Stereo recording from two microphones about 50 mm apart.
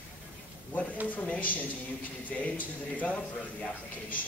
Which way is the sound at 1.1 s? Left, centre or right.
Left.